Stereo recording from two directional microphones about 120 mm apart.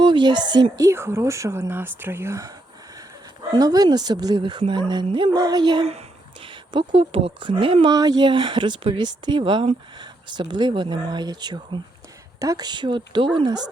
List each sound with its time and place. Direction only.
0.0 s speech: 40° right (ahead or behind)
0.9 s speech: 20° right (ahead or behind)
3.5 s speech: 35° right (ahead or behind)
7.9 s speech: 35° right (ahead or behind)